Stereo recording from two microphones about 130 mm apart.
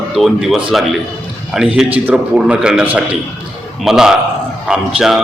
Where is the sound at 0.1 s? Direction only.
Centre (ahead or behind).